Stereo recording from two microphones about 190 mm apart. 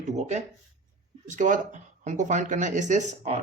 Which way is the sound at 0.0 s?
40° right (ahead or behind).